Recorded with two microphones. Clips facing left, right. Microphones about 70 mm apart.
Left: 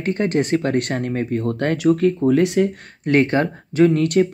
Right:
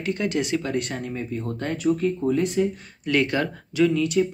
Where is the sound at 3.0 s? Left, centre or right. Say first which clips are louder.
Left 6 dB; left.